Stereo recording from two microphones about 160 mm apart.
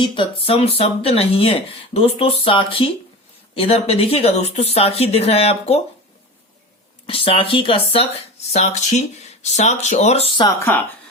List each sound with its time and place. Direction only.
0.0 s speech: 30° left (ahead or behind)
7.1 s speech: 35° left (ahead or behind)
10.6 s speech: 15° left (ahead or behind)